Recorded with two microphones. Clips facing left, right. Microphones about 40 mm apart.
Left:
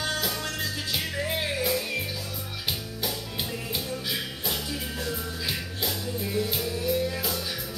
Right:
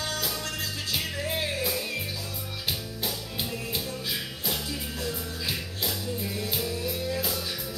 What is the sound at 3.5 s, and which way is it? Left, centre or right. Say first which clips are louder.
Music: left 1 dB; centre.